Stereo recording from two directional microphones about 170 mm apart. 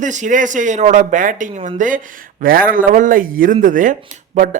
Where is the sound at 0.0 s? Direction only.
45° right (ahead or behind).